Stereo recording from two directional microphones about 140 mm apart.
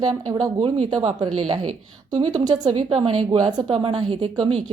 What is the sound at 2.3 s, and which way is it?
A woman's voice, 30° right (ahead or behind).